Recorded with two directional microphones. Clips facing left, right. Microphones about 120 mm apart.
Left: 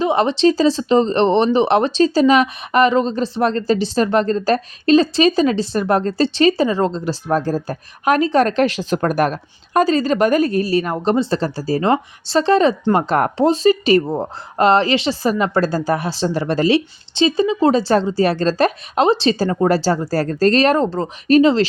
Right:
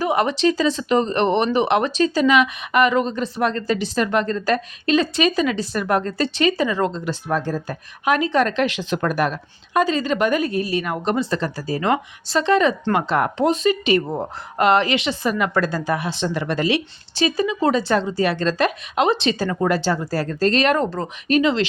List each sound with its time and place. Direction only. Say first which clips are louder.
0.0 s speech: left 4 dB; 25° left (ahead or behind)
12.9 s speech: left 3 dB; 45° left (ahead or behind)
13.4 s speech: left 6 dB; 30° left (ahead or behind)